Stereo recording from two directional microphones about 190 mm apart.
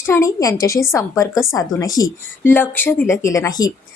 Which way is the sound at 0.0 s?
15° left (ahead or behind).